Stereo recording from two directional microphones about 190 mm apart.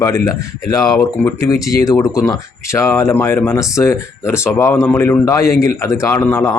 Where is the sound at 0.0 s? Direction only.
15° left (ahead or behind).